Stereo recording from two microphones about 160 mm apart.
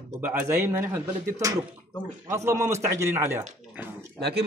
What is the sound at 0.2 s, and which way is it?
A man's voice, 10° right (ahead or behind).